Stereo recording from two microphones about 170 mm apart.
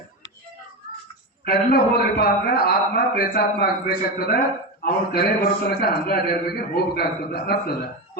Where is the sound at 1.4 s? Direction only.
65° left (ahead or behind).